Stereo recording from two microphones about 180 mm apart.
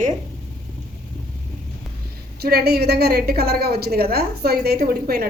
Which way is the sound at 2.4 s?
60° right (ahead or behind).